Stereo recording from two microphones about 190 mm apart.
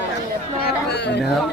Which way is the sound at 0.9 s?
65° left (ahead or behind).